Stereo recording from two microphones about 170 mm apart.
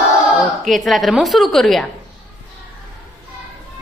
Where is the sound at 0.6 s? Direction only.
Centre (ahead or behind).